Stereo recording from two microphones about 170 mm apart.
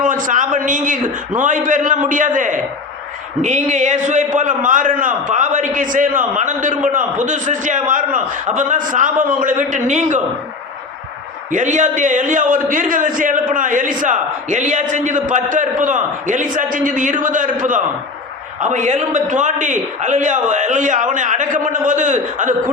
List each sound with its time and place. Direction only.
0.0 s a man's voice: 50° right (ahead or behind)
11.5 s a man's voice: 45° right (ahead or behind)